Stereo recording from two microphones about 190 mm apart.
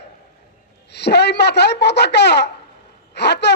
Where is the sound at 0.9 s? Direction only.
65° left (ahead or behind).